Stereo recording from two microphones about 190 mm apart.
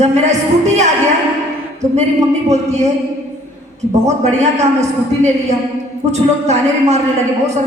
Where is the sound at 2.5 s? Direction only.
35° right (ahead or behind).